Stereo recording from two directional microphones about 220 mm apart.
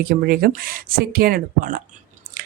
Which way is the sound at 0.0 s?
40° right (ahead or behind).